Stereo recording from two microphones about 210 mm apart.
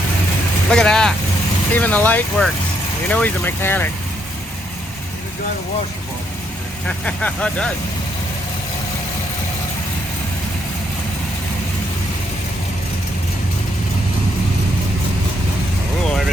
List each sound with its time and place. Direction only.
0.7 s speech: 5° left (ahead or behind)
6.8 s speech: 5° left (ahead or behind)